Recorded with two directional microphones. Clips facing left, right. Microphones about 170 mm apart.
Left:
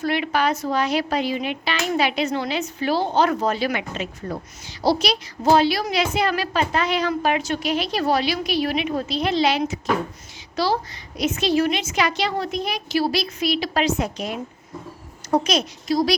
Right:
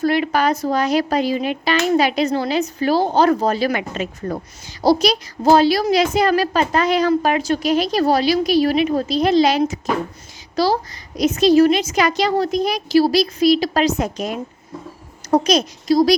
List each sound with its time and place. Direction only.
0.0 s a woman's voice: 40° right (ahead or behind)